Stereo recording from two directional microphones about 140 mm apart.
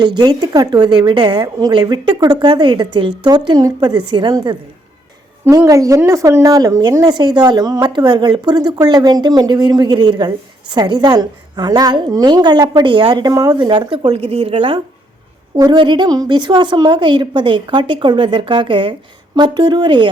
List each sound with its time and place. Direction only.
0.0 s a woman's voice: 30° right (ahead or behind)
15.5 s a woman's voice: 25° right (ahead or behind)